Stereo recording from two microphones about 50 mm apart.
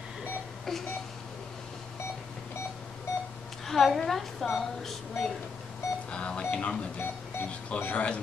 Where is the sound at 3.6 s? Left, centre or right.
Centre.